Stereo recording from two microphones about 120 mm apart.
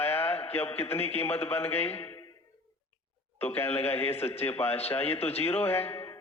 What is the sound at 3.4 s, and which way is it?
A man's voice, 20° left (ahead or behind).